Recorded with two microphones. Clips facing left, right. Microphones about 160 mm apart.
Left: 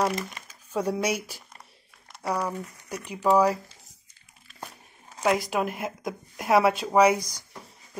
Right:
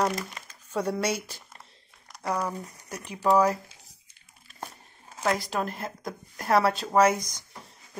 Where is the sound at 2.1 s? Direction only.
5° left (ahead or behind).